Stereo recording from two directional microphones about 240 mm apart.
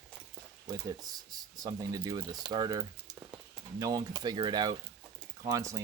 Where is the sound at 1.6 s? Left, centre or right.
Centre.